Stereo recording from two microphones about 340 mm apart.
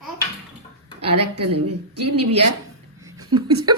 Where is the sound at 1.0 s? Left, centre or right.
Right.